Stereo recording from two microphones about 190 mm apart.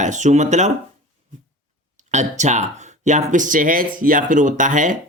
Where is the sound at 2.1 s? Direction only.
40° right (ahead or behind).